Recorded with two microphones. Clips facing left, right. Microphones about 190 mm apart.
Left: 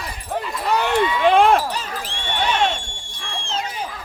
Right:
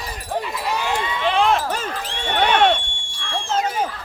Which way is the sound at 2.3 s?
55° right (ahead or behind).